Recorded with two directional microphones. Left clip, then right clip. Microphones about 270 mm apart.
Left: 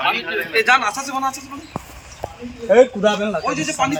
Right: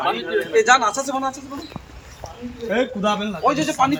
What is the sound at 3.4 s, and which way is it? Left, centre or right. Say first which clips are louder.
Speech: right 2 dB; right.